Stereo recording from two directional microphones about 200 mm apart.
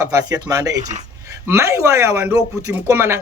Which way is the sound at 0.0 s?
15° right (ahead or behind).